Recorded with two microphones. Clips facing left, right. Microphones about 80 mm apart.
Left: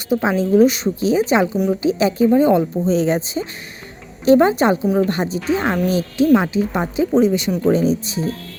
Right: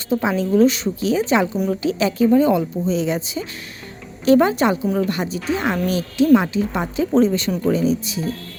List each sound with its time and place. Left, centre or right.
0.1 s speech: left
5.5 s speech: centre
7.7 s speech: left